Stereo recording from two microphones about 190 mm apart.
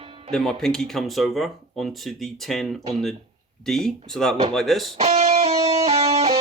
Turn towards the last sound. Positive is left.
turn(degrees=-35)  # may be behind; listen again after turning